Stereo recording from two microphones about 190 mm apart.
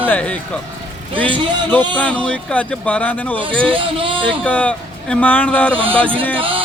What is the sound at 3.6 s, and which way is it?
Speech, 25° right (ahead or behind).